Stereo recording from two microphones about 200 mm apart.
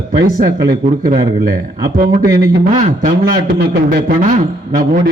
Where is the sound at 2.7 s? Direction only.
35° right (ahead or behind).